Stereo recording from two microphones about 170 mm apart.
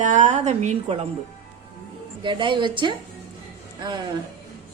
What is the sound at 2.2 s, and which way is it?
A woman's voice, 30° right (ahead or behind).